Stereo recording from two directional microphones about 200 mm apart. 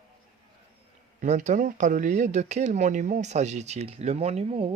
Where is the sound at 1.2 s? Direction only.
35° right (ahead or behind).